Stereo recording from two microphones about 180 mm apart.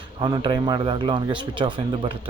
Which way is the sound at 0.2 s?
25° right (ahead or behind).